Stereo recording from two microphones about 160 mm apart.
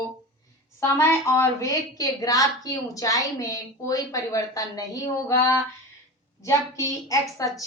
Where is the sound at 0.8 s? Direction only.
15° left (ahead or behind).